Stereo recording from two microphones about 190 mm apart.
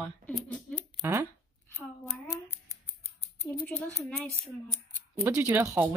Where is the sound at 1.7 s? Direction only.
10° left (ahead or behind).